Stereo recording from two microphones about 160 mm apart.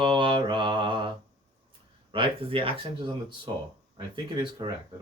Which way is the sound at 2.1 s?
35° right (ahead or behind).